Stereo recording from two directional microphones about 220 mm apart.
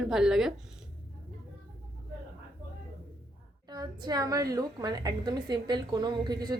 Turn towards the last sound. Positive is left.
turn(degrees=-20)  # may be behind; listen again after turning